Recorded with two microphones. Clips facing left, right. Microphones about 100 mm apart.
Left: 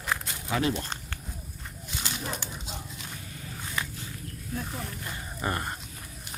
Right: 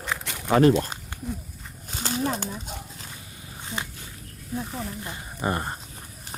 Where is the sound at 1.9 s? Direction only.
40° right (ahead or behind).